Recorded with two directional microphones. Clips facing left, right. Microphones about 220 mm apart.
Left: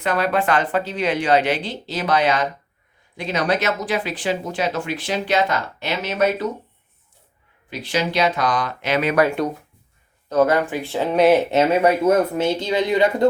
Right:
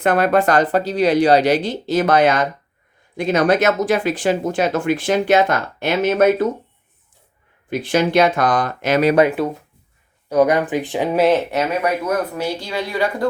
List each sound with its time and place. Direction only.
0.0 s speech: 50° right (ahead or behind)
7.7 s speech: 50° right (ahead or behind)
9.4 s speech: 5° right (ahead or behind)
10.2 s speech: 15° right (ahead or behind)
11.5 s speech: 25° left (ahead or behind)